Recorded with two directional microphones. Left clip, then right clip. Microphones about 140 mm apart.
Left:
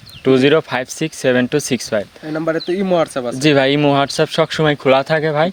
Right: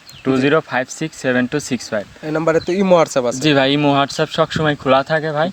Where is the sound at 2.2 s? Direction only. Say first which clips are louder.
Right 3 dB; 55° right (ahead or behind).